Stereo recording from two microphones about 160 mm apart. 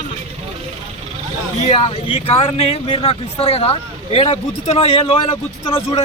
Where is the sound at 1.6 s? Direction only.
40° left (ahead or behind).